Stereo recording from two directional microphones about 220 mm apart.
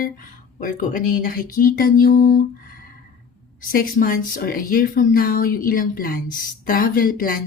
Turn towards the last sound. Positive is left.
turn(degrees=40)  # may be behind; listen again after turning